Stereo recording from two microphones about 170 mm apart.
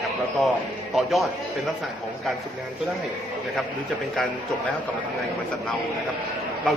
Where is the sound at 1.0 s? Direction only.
Centre (ahead or behind).